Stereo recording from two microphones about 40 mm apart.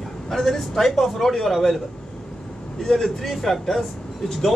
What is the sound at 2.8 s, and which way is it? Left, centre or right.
A man's voice, centre.